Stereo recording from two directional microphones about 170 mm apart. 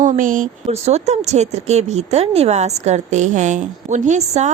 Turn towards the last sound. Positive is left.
turn(degrees=-40)  # may be behind; listen again after turning